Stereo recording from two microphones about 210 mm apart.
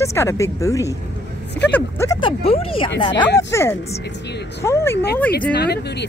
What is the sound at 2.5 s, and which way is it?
Speech, 25° left (ahead or behind).